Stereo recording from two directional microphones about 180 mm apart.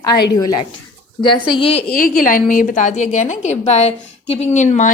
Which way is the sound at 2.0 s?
50° left (ahead or behind).